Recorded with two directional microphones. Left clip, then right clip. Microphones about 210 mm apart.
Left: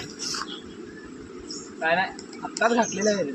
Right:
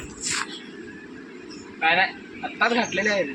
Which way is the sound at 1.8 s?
25° left (ahead or behind).